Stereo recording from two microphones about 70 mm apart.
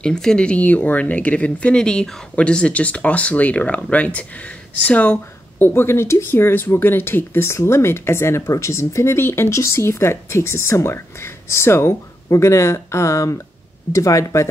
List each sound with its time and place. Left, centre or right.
0.0 s speech: centre; by 14.5 s left